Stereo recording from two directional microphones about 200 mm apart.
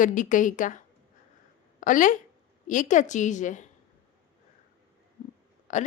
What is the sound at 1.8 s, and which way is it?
A woman's voice, 40° left (ahead or behind).